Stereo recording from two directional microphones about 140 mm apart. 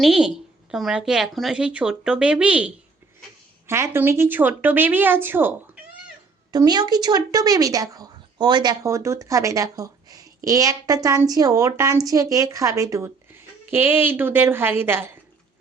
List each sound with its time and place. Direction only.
0.0 s speech: 5° right (ahead or behind)
6.5 s a woman's voice: 30° right (ahead or behind)